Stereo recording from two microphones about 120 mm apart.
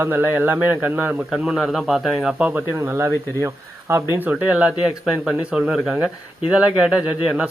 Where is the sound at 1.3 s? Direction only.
Centre (ahead or behind); by 4.1 s 20° right (ahead or behind).